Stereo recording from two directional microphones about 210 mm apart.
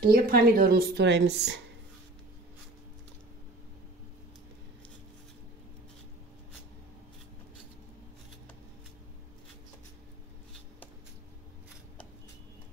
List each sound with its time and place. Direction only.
0.0 s a woman's voice: 45° right (ahead or behind)